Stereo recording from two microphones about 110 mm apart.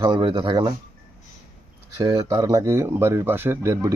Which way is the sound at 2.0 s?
30° right (ahead or behind).